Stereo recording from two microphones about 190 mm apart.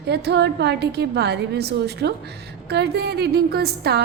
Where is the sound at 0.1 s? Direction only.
65° right (ahead or behind).